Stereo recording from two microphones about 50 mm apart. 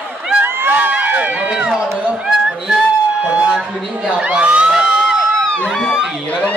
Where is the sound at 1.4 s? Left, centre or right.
Right.